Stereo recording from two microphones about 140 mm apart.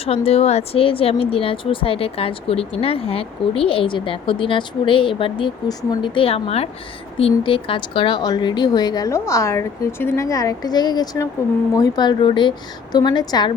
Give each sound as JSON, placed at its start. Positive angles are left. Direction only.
{"t": 0.0, "sound": "a woman's voice", "side_deg": 45}